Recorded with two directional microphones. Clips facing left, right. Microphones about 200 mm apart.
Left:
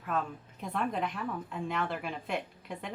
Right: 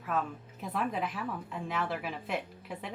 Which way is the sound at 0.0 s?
Centre (ahead or behind).